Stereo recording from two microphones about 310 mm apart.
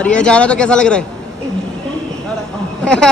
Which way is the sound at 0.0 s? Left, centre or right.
Centre.